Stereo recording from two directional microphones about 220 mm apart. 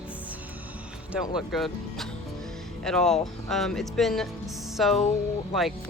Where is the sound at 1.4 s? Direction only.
Centre (ahead or behind).